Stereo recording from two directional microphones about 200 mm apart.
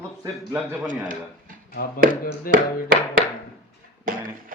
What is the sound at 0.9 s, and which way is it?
Speech, 40° right (ahead or behind).